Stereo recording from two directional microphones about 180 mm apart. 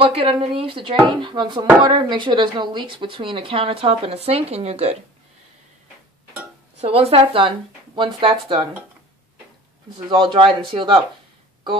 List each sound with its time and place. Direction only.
0.0 s a woman's voice: 30° right (ahead or behind)
6.8 s speech: 35° right (ahead or behind)
10.0 s speech: 25° right (ahead or behind)